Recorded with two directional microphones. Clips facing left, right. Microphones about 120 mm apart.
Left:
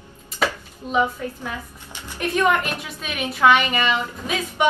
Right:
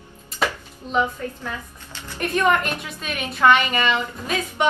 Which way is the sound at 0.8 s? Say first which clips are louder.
Left 1 dB; 10° left (ahead or behind).